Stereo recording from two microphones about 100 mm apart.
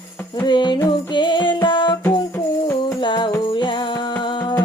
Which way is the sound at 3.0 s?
50° left (ahead or behind).